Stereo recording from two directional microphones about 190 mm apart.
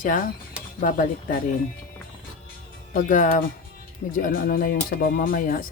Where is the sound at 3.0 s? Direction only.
45° left (ahead or behind).